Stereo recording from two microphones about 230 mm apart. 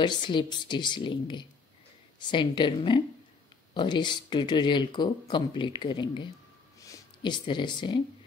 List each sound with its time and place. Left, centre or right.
0.0 s speech: centre